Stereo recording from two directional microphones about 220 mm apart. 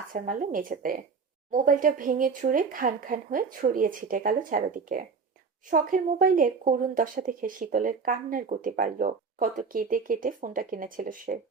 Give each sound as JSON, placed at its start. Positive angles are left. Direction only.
{"t": 0.1, "sound": "speech", "side_deg": -40}